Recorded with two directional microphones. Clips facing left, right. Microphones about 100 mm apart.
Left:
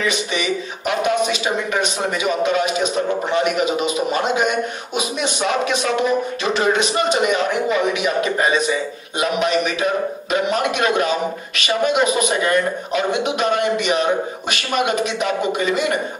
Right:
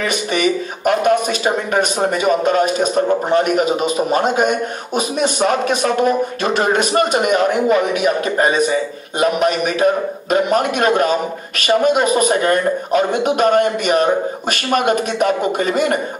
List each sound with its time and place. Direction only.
0.0 s speech: 50° right (ahead or behind)